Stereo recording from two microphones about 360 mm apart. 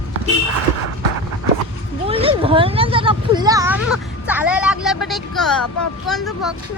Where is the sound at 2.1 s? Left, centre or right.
Centre.